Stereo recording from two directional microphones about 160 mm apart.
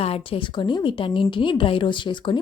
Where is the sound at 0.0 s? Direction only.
35° left (ahead or behind).